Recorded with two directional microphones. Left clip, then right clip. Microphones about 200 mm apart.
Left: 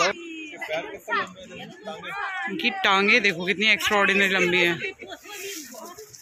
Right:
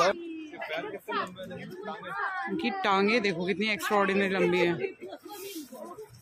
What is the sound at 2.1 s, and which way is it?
Speech, 20° left (ahead or behind).